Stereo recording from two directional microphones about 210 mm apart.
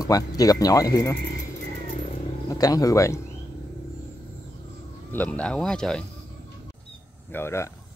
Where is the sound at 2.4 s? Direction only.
15° left (ahead or behind).